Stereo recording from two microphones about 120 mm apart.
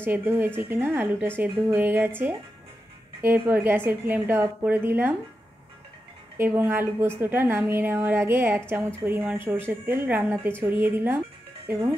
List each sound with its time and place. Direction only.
0.0 s a woman's voice: 20° right (ahead or behind)
6.3 s a woman's voice: 20° right (ahead or behind)